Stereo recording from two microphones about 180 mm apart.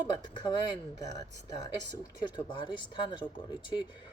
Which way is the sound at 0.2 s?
25° left (ahead or behind).